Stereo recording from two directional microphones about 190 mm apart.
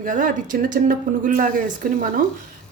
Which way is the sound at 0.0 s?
45° right (ahead or behind).